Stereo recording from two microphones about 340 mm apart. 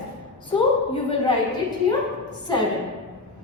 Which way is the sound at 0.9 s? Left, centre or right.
Centre.